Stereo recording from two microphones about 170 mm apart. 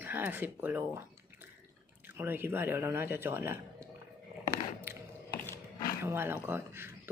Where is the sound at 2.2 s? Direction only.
15° right (ahead or behind).